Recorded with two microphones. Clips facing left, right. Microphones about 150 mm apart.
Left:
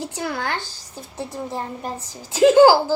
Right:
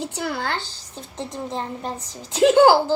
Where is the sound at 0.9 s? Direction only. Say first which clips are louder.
Left 1 dB; 10° left (ahead or behind).